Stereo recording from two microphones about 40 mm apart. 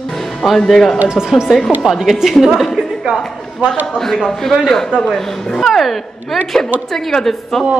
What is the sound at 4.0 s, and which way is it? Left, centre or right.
A man's voice, centre.